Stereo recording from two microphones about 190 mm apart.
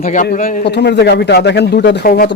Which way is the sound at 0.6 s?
60° left (ahead or behind).